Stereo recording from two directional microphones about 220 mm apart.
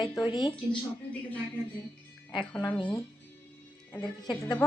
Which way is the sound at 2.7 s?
20° left (ahead or behind).